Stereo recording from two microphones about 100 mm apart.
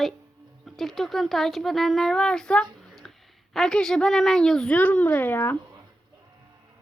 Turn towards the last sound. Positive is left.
turn(degrees=20)  # may be behind; listen again after turning